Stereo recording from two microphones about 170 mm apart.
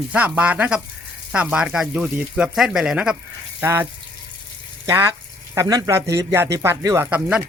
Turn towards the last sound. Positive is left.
turn(degrees=-10)  # may be behind; listen again after turning